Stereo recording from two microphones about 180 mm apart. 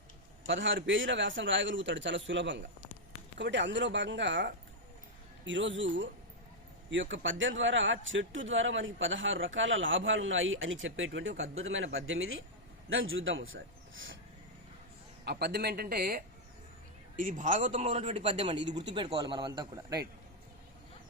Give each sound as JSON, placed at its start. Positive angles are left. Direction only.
{"t": 0.4, "sound": "speech", "side_deg": -90}
{"t": 3.3, "sound": "speech", "side_deg": -80}
{"t": 15.2, "sound": "a man's voice", "side_deg": -65}
{"t": 17.2, "sound": "a man's voice", "side_deg": -45}
{"t": 17.6, "sound": "a man's voice", "side_deg": -35}